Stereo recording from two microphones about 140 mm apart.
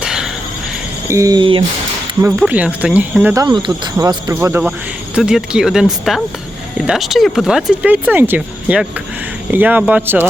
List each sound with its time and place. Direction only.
0.0 s a sound: 5° right (ahead or behind)
1.0 s speech: 20° right (ahead or behind)
2.4 s speech: 10° right (ahead or behind)
3.3 s speech: 30° right (ahead or behind)
5.1 s speech: 5° right (ahead or behind)